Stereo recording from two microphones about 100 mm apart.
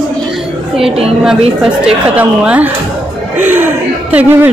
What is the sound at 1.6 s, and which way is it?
Speech, 10° right (ahead or behind).